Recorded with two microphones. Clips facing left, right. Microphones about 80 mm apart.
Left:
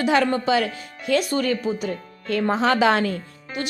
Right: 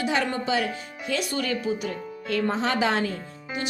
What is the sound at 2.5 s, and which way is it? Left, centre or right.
Speech, left.